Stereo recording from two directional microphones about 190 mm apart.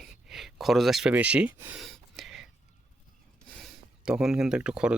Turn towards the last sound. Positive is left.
turn(degrees=-5)  # may be behind; listen again after turning